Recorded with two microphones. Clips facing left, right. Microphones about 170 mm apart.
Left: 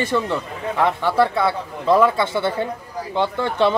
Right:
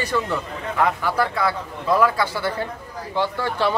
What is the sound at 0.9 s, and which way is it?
Speech, 25° left (ahead or behind).